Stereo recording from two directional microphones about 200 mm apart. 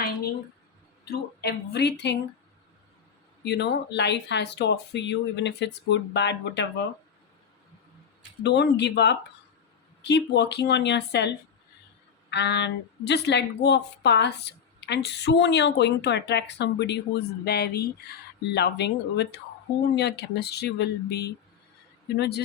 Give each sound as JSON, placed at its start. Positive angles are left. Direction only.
{"t": 1.1, "sound": "a woman's voice", "side_deg": 55}
{"t": 3.4, "sound": "a woman's voice", "side_deg": 60}
{"t": 8.4, "sound": "a woman's voice", "side_deg": 60}